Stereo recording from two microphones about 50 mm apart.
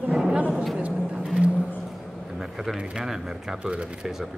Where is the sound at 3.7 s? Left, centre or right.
Right.